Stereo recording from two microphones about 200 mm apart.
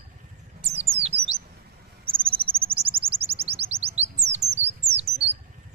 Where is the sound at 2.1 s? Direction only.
25° right (ahead or behind).